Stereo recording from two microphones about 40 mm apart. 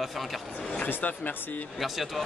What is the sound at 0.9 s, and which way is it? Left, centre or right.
Speech, left.